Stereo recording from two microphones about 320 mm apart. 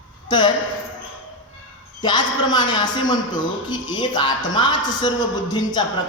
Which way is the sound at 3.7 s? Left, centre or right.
Centre.